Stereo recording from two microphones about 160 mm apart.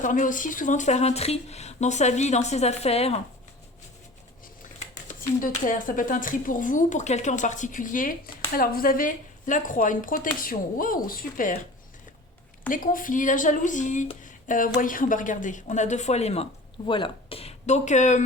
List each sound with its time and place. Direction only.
0.0 s a woman's voice: 55° left (ahead or behind)
4.8 s speech: 50° left (ahead or behind)
12.6 s a woman's voice: 60° left (ahead or behind)